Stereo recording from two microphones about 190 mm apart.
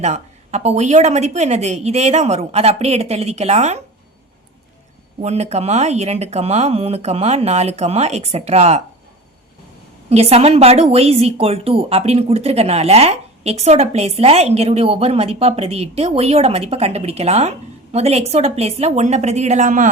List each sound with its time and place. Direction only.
0.0 s a woman's voice: 35° right (ahead or behind)
5.2 s a woman's voice: 35° right (ahead or behind)
10.1 s a woman's voice: 30° right (ahead or behind)